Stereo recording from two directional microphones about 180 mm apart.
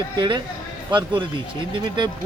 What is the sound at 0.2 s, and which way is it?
Speech, 25° right (ahead or behind).